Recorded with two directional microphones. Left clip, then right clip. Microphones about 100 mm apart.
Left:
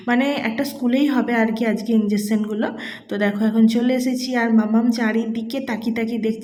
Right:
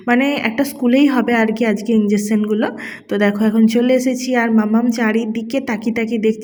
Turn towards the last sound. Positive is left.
turn(degrees=-45)  # may be behind; listen again after turning